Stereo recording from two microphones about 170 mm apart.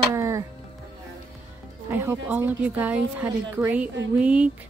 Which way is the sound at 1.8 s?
15° right (ahead or behind).